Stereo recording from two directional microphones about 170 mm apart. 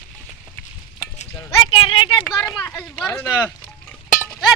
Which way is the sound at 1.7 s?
30° left (ahead or behind).